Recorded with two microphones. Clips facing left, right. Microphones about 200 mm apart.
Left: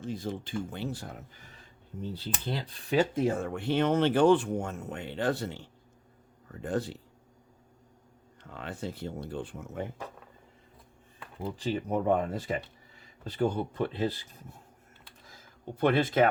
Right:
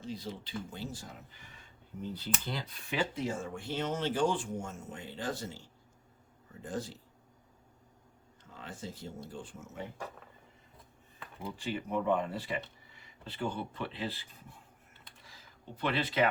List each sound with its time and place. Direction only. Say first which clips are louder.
0.0 s speech: left 6 dB; 50° left (ahead or behind)
2.1 s speech: left 4 dB; 30° left (ahead or behind); by 7.0 s 65° left (ahead or behind)
8.4 s speech: left 7 dB; 65° left (ahead or behind)
11.5 s speech: left 4 dB; 40° left (ahead or behind)
15.3 s speech: left 8 dB; 50° left (ahead or behind)